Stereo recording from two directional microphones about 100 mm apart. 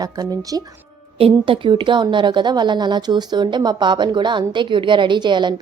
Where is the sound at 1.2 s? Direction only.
60° right (ahead or behind).